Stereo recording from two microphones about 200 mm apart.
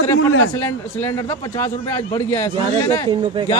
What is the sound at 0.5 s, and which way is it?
A man's voice, 15° left (ahead or behind).